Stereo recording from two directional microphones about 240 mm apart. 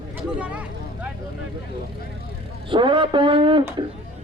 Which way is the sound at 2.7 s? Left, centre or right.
Right.